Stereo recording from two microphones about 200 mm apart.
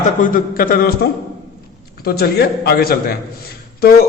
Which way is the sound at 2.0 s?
50° left (ahead or behind).